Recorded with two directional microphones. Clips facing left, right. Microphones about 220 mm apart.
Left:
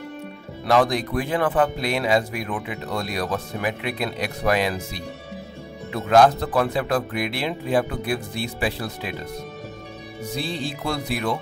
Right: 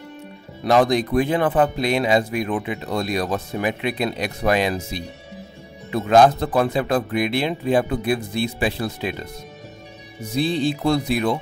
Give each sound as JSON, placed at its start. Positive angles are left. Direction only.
{"t": 0.7, "sound": "speech", "side_deg": -20}
{"t": 10.3, "sound": "speech", "side_deg": -20}